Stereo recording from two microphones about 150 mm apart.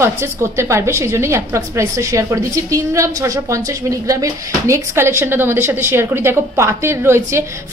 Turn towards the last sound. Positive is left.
turn(degrees=-20)  # may be behind; listen again after turning